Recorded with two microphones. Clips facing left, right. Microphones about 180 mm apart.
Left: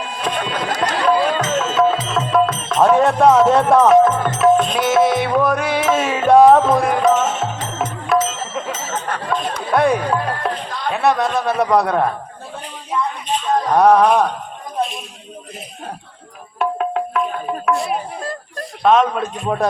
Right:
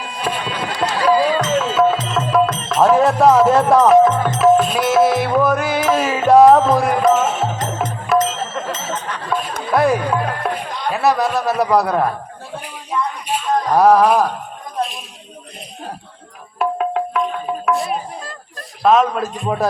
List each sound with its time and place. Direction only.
0.0 s run: 5° right (ahead or behind)
1.4 s music: centre (ahead or behind)
8.9 s a sound: 50° left (ahead or behind)
9.7 s music: centre (ahead or behind)
10.9 s a man's voice: centre (ahead or behind)
12.9 s a sound: centre (ahead or behind)
13.2 s speech: 5° right (ahead or behind)
16.6 s music: centre (ahead or behind)
17.7 s a sound: centre (ahead or behind)
18.8 s a man's voice: centre (ahead or behind)